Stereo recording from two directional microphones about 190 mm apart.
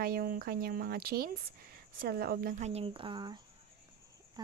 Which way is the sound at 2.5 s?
35° right (ahead or behind).